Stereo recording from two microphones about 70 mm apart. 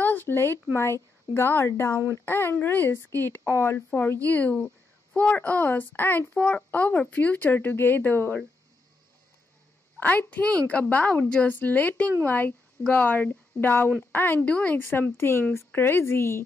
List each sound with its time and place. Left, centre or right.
0.0 s a sound: left
0.7 s a child's voice: left
9.9 s a child's voice: left
14.8 s speech: left